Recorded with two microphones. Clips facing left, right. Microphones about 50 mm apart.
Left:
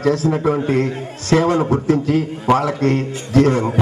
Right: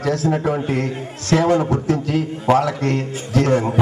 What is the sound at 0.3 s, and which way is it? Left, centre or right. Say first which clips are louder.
A man's voice: left 3 dB; left.